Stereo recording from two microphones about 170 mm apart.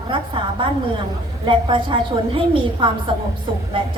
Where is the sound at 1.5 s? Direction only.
30° right (ahead or behind).